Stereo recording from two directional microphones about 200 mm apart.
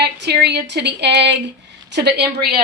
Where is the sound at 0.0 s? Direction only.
55° right (ahead or behind).